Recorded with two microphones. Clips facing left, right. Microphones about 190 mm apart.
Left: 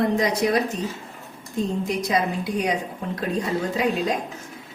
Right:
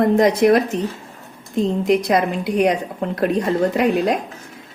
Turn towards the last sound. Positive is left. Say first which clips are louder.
# right 6 dB
turn(degrees=-65)  # may be behind; listen again after turning